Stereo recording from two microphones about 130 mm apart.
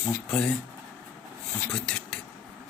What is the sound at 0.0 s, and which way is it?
Speech, 10° left (ahead or behind).